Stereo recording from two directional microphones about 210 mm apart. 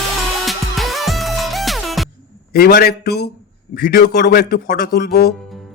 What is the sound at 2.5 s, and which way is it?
A man's voice, 45° left (ahead or behind).